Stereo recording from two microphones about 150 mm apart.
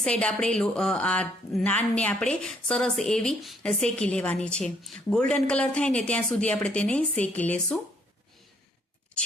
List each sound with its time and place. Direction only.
0.0 s a woman's voice: 5° left (ahead or behind)